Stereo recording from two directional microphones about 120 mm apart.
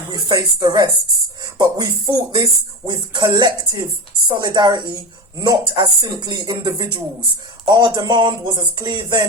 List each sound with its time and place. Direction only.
0.1 s speech: 40° right (ahead or behind)